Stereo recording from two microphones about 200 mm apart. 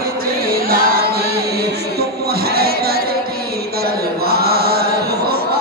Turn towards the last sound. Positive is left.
turn(degrees=-50)  # may be behind; listen again after turning